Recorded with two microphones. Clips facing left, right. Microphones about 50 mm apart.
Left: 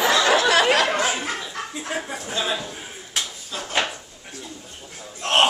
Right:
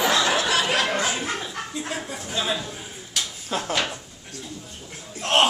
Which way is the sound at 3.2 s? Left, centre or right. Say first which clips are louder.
Left 1 dB; left.